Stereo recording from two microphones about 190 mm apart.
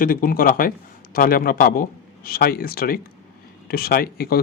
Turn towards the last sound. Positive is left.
turn(degrees=55)  # may be behind; listen again after turning